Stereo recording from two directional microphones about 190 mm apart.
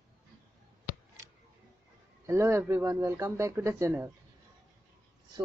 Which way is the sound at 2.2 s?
15° right (ahead or behind).